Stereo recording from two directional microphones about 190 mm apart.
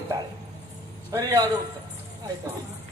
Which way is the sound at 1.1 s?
20° right (ahead or behind).